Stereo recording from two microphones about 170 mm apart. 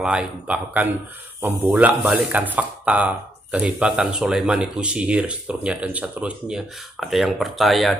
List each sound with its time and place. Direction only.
0.0 s speech: 5° right (ahead or behind)